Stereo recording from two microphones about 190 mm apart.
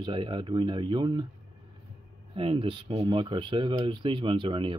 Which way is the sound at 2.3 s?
30° right (ahead or behind).